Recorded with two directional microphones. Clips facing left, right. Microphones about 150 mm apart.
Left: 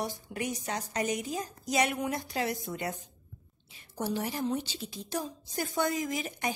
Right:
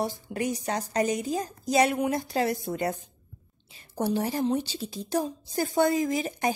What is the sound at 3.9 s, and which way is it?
A woman's voice, 35° right (ahead or behind).